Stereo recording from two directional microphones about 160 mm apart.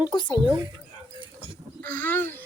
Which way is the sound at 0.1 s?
25° left (ahead or behind).